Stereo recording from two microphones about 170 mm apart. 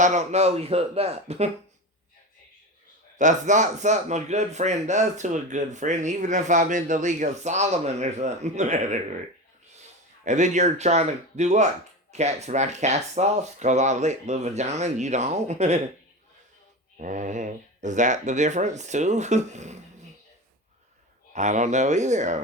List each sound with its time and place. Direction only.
0.0 s speech: 45° right (ahead or behind)
3.2 s speech: 45° right (ahead or behind)
10.2 s speech: 45° right (ahead or behind)
17.0 s speech: 50° right (ahead or behind)
21.3 s speech: 45° right (ahead or behind)